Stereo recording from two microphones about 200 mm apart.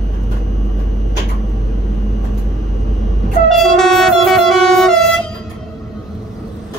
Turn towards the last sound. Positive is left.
turn(degrees=0)  # may be behind; listen again after turning